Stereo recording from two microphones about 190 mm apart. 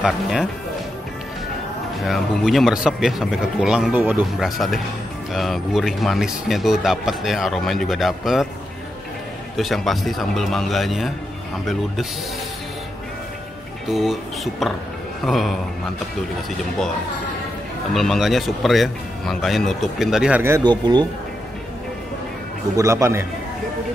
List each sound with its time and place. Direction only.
0.0 s speech: centre (ahead or behind)
2.0 s speech: centre (ahead or behind)
9.6 s speech: centre (ahead or behind)
13.8 s speech: centre (ahead or behind)
17.9 s speech: centre (ahead or behind); by 21.1 s 20° right (ahead or behind)
22.8 s a man's voice: 15° right (ahead or behind)